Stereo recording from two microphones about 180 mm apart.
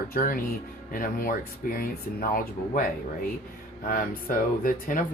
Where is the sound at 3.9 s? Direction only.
50° left (ahead or behind).